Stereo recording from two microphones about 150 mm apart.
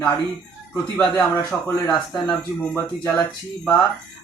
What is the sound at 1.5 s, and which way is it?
Speech, 5° left (ahead or behind).